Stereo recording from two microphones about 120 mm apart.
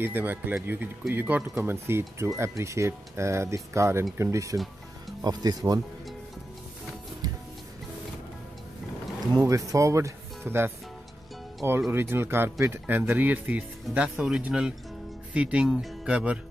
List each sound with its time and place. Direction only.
0.0 s speech: 15° right (ahead or behind); by 5.8 s 35° right (ahead or behind)
9.2 s speech: 30° right (ahead or behind)
11.9 s speech: 20° right (ahead or behind)